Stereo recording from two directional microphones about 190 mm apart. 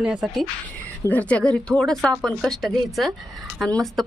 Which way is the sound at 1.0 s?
10° left (ahead or behind).